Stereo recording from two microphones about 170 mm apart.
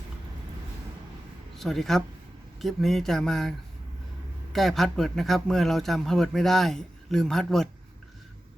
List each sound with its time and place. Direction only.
1.5 s a man's voice: centre (ahead or behind)
4.5 s a man's voice: centre (ahead or behind)